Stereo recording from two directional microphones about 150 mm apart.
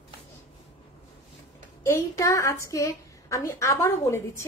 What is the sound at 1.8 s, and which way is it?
A woman's voice, 20° left (ahead or behind).